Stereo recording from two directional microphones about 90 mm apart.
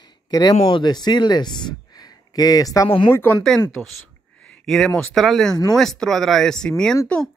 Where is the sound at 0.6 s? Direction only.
65° left (ahead or behind); by 2.9 s 40° left (ahead or behind).